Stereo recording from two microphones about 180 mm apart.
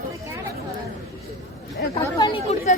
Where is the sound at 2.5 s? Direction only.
35° left (ahead or behind).